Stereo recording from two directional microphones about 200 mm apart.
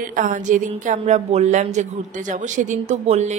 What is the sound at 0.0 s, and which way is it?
A woman's voice, 45° right (ahead or behind).